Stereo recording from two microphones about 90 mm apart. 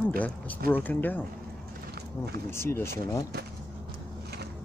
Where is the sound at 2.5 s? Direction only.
30° left (ahead or behind).